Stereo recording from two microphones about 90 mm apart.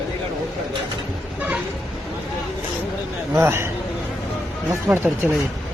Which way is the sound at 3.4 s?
25° right (ahead or behind).